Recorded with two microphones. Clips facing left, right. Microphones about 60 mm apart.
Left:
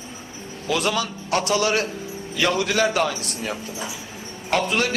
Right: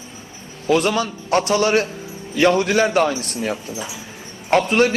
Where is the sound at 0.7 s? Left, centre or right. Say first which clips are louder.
Right 5 dB; right.